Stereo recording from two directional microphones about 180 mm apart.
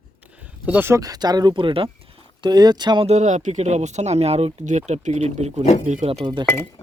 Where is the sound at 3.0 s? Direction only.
40° right (ahead or behind).